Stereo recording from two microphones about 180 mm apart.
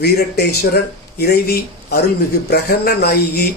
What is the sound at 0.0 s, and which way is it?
Speech, 60° left (ahead or behind).